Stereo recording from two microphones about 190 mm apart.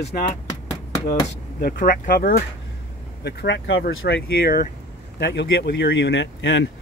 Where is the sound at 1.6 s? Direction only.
50° left (ahead or behind).